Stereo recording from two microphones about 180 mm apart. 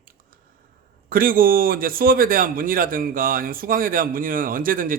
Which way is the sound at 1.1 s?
50° right (ahead or behind).